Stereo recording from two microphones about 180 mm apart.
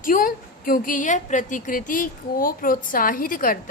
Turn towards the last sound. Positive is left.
turn(degrees=50)  # may be behind; listen again after turning